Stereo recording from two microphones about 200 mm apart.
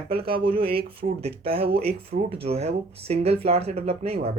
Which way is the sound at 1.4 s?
30° right (ahead or behind).